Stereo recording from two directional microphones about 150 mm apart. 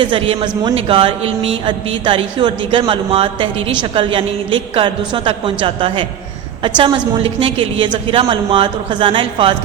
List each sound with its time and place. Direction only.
0.0 s a man's voice: 35° right (ahead or behind)